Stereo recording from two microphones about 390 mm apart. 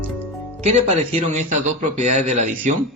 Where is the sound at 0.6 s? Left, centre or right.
Centre.